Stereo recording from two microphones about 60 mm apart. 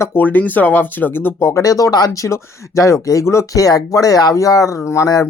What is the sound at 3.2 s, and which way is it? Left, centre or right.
Speech, left.